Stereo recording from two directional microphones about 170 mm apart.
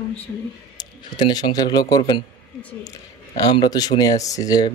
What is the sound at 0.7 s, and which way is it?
Speech, 25° left (ahead or behind).